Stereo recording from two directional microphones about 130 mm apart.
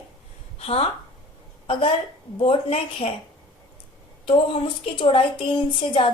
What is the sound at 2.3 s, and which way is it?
Speech, 45° left (ahead or behind).